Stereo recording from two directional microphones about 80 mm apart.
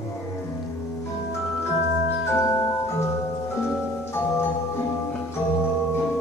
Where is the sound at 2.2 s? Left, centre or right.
Left.